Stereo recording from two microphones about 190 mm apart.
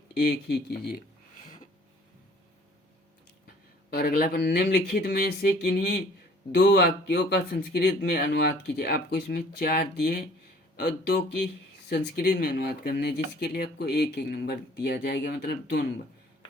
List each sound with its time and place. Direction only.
0.2 s speech: 60° left (ahead or behind)
3.8 s speech: 50° left (ahead or behind)